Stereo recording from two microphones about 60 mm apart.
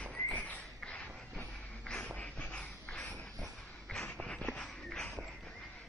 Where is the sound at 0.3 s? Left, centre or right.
Left.